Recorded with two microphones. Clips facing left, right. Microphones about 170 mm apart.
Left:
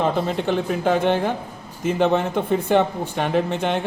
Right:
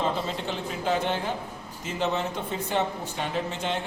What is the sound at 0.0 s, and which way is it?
Speech, 60° left (ahead or behind).